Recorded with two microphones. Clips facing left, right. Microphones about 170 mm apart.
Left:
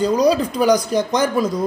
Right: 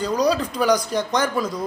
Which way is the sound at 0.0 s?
10° left (ahead or behind).